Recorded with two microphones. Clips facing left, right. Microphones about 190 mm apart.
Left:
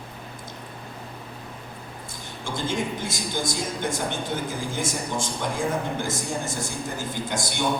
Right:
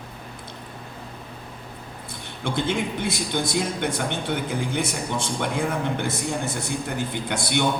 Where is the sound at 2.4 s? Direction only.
65° right (ahead or behind).